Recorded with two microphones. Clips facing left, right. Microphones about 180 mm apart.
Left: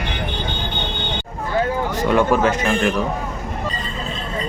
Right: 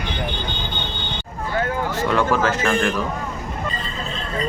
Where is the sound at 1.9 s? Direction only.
15° left (ahead or behind).